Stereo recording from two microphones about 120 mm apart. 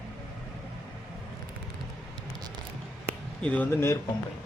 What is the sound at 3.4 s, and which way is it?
Speech, 10° left (ahead or behind).